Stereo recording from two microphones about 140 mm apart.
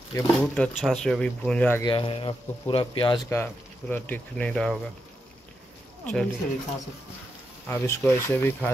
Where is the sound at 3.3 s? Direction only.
15° left (ahead or behind).